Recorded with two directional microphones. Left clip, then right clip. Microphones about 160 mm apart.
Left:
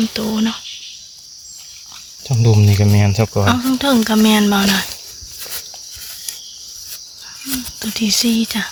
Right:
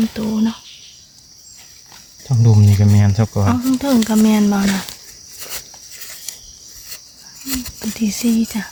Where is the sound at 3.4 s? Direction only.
Centre (ahead or behind).